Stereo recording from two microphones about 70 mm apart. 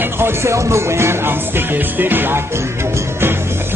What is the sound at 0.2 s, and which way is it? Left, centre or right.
Music, right.